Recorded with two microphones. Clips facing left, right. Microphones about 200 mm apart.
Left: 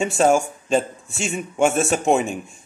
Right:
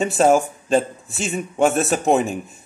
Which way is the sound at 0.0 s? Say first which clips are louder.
Right 2 dB; centre (ahead or behind).